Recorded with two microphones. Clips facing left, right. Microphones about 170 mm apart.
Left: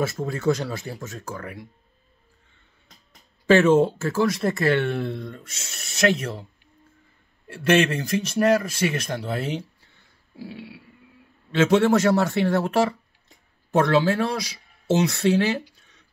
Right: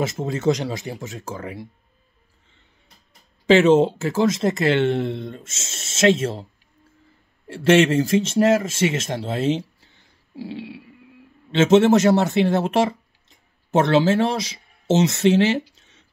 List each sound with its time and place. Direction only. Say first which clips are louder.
0.0 s speech: right 2 dB; 20° right (ahead or behind)
3.4 s speech: right 2 dB; 20° right (ahead or behind)
7.4 s speech: right 4 dB; 25° right (ahead or behind)